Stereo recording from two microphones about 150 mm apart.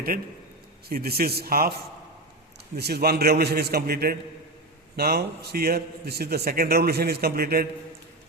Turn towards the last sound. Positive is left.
turn(degrees=-90)